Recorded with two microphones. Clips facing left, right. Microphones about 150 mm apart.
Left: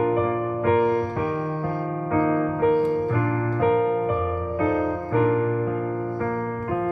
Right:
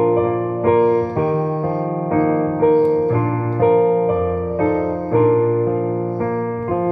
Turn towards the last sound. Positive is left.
turn(degrees=-40)  # may be behind; listen again after turning